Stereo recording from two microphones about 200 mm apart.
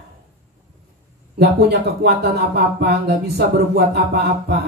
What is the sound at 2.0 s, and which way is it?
Speech, 55° right (ahead or behind).